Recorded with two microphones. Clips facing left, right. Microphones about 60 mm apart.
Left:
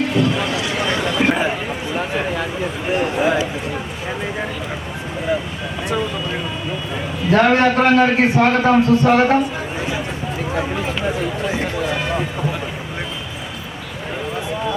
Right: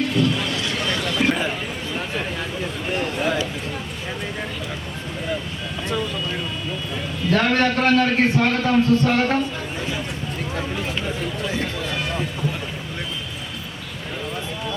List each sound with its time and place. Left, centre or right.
0.1 s a sound: centre
2.8 s speech: centre
6.9 s a man's voice: left
8.5 s a man's voice: left
10.5 s speech: left
11.1 s a sound: centre